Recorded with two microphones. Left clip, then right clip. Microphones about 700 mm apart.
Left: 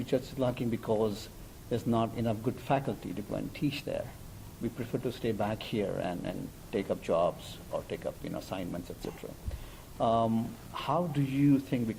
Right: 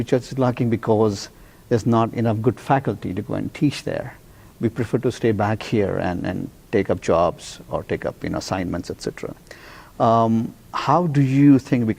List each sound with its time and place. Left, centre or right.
0.0 s speech: right